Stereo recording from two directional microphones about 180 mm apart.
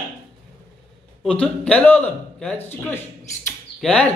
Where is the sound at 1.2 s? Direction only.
5° left (ahead or behind).